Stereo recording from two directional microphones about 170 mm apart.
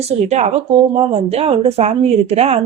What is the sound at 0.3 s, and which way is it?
A woman's voice, 40° right (ahead or behind).